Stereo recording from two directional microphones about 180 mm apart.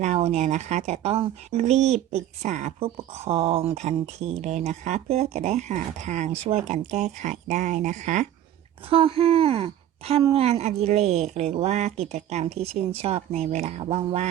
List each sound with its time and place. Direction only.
0.0 s speech: 35° right (ahead or behind)
8.9 s speech: 30° right (ahead or behind)